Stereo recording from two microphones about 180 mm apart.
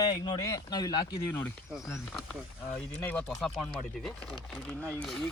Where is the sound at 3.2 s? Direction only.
Centre (ahead or behind).